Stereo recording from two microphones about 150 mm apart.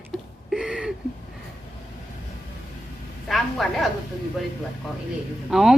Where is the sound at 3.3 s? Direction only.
Centre (ahead or behind).